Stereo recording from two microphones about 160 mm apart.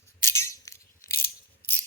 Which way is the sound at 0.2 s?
15° left (ahead or behind).